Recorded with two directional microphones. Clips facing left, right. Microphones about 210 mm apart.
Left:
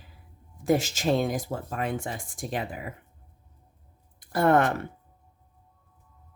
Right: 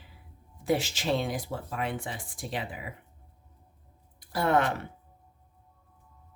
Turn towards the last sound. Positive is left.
turn(degrees=50)  # may be behind; listen again after turning